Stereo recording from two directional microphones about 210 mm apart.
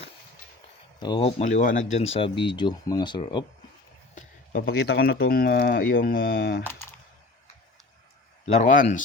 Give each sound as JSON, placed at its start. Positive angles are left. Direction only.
{"t": 0.9, "sound": "speech", "side_deg": 25}
{"t": 4.1, "sound": "speech", "side_deg": 40}
{"t": 8.4, "sound": "speech", "side_deg": 35}